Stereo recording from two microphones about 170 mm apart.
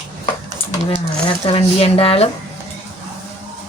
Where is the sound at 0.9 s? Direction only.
30° left (ahead or behind).